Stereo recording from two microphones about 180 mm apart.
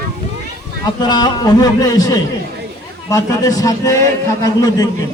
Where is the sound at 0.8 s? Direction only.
25° left (ahead or behind).